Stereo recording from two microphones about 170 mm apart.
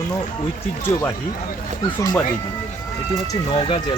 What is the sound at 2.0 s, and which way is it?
Speech, 20° left (ahead or behind).